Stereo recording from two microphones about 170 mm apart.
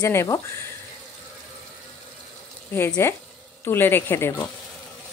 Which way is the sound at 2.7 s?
15° left (ahead or behind).